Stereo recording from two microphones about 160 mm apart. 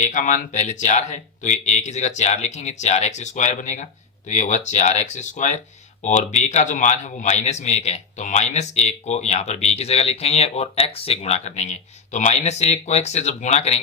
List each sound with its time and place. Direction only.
0.0 s a man's voice: 50° left (ahead or behind)